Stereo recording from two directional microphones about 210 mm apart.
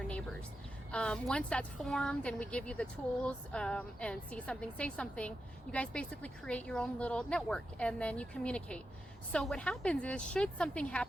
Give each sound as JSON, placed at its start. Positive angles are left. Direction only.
{"t": 0.9, "sound": "a woman's voice", "side_deg": 5}